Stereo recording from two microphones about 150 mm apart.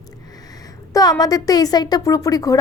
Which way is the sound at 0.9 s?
25° left (ahead or behind).